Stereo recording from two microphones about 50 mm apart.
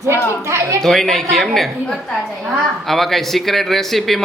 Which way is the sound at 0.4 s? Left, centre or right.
Right.